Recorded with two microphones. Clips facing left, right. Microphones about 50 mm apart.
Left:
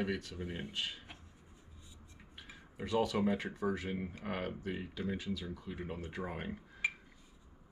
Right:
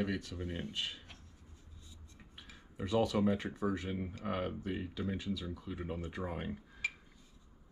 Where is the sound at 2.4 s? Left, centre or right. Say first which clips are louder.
Right 1 dB; centre.